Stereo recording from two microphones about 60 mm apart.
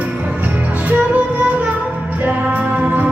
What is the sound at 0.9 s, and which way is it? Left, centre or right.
Music, right.